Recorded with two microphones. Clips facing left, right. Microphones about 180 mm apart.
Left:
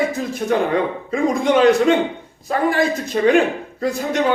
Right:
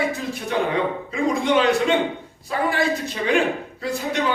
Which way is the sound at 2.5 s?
45° left (ahead or behind).